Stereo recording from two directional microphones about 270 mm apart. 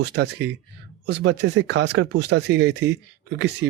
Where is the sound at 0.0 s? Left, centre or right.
Right.